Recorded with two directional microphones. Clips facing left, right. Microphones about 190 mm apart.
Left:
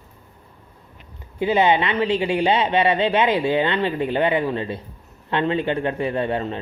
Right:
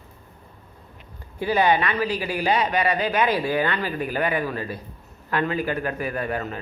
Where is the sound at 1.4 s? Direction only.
25° left (ahead or behind).